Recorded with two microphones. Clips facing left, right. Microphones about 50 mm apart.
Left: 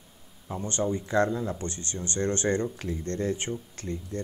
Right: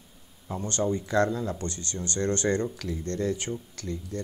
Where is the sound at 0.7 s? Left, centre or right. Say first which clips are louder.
Right 1 dB; centre.